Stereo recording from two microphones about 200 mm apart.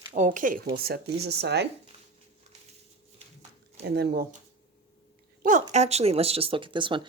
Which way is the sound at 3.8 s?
50° right (ahead or behind).